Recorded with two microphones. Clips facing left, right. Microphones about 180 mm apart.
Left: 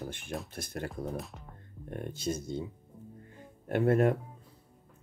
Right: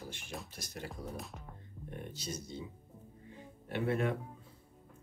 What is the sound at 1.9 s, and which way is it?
Speech, 50° left (ahead or behind).